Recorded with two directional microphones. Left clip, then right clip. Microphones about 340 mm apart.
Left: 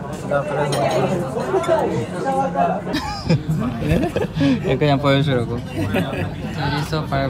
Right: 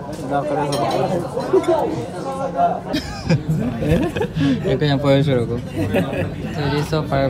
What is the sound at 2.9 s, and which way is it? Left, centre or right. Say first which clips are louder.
Speech: even; centre.